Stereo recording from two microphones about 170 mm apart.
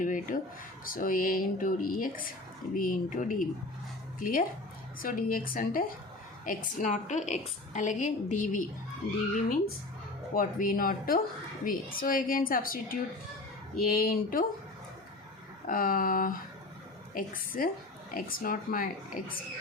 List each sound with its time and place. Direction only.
0.0 s a woman's voice: 50° left (ahead or behind)
10.3 s a woman's voice: 55° left (ahead or behind)
15.6 s a woman's voice: 55° left (ahead or behind)